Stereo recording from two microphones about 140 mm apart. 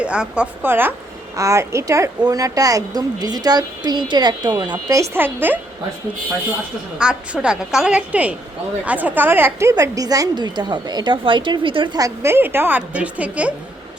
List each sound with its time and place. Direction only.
0.0 s a woman's voice: 10° right (ahead or behind)
7.0 s a woman's voice: 5° right (ahead or behind); by 11.9 s 35° right (ahead or behind)
11.9 s a woman's voice: 20° right (ahead or behind)